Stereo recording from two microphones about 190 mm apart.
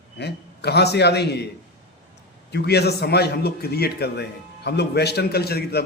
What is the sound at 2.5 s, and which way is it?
A man's voice, 60° left (ahead or behind).